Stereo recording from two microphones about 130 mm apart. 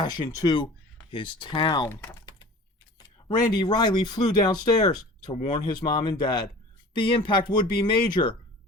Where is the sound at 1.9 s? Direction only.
20° left (ahead or behind).